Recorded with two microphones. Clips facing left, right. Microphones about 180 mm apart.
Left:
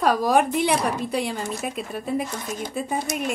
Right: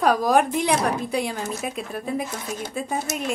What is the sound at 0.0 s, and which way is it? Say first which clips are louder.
Speech: right 1 dB; centre (ahead or behind).